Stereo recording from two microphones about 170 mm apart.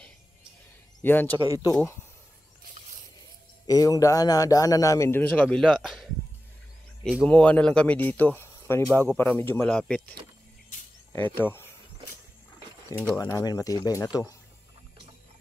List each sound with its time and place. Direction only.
1.0 s speech: 10° left (ahead or behind)
1.3 s speech: 20° right (ahead or behind)
3.6 s a man's voice: 20° left (ahead or behind); by 6.0 s centre (ahead or behind)
7.2 s speech: 10° left (ahead or behind)
11.1 s speech: 10° left (ahead or behind)
13.2 s a man's voice: 20° left (ahead or behind)